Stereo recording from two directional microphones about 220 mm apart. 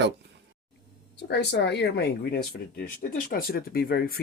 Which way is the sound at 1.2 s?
50° left (ahead or behind).